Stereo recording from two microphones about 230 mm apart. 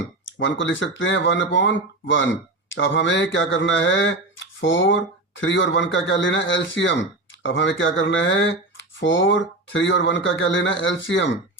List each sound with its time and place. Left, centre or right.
0.3 s speech: left